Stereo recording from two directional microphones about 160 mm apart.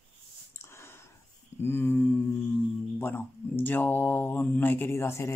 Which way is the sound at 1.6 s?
15° left (ahead or behind).